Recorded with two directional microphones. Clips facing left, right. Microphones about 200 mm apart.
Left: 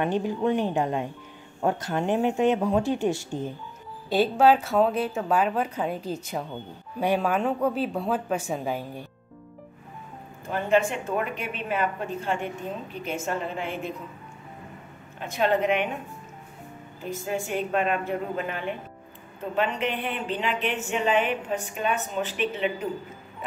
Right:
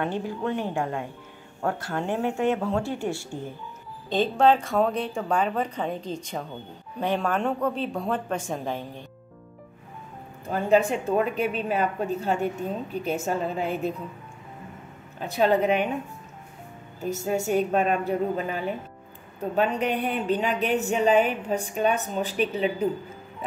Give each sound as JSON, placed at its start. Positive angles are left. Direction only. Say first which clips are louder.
{"t": 0.0, "sound": "speech", "louder": "left 3 dB", "side_deg": 15}
{"t": 4.1, "sound": "speech", "louder": "left 1 dB", "side_deg": 10}
{"t": 10.5, "sound": "speech", "louder": "right 2 dB", "side_deg": -35}
{"t": 15.1, "sound": "speech", "louder": "right 2 dB", "side_deg": -35}
{"t": 17.0, "sound": "speech", "louder": "right 4 dB", "side_deg": -45}